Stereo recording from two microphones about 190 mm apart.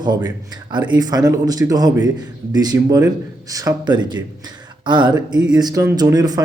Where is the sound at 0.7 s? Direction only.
25° right (ahead or behind).